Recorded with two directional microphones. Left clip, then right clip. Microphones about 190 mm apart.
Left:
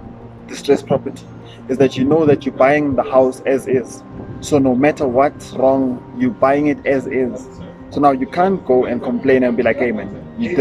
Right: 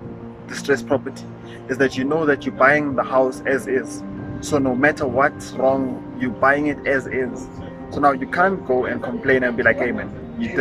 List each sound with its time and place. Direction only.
0.5 s speech: 15° left (ahead or behind)